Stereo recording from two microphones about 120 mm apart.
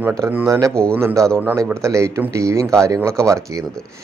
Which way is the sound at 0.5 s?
25° right (ahead or behind).